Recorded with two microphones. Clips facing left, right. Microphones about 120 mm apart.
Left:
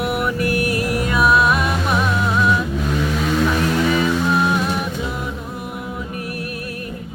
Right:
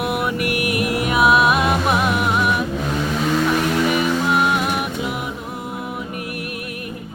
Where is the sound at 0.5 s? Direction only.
20° right (ahead or behind).